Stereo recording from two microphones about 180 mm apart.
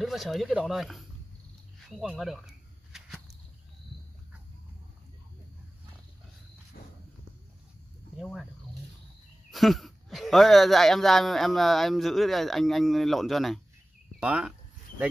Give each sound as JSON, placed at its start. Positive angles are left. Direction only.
{"t": 0.0, "sound": "speech", "side_deg": 0}
{"t": 1.9, "sound": "a sound", "side_deg": 0}
{"t": 6.7, "sound": "walk", "side_deg": 55}
{"t": 8.2, "sound": "speech", "side_deg": 0}
{"t": 9.5, "sound": "speech", "side_deg": 0}